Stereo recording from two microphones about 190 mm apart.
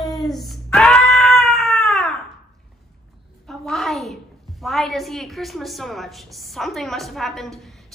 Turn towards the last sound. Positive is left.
turn(degrees=0)  # may be behind; listen again after turning